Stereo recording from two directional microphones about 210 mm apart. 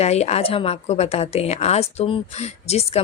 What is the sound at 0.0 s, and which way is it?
A woman's voice, 30° left (ahead or behind).